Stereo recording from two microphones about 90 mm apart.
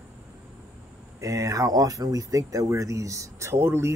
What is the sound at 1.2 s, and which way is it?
Speech, 35° right (ahead or behind).